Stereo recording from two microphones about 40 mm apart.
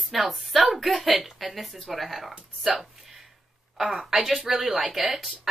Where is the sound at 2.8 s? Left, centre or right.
Centre.